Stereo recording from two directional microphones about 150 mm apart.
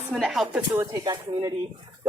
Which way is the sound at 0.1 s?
Centre (ahead or behind).